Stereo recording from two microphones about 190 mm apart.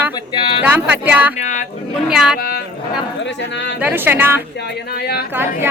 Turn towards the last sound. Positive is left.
turn(degrees=-10)  # may be behind; listen again after turning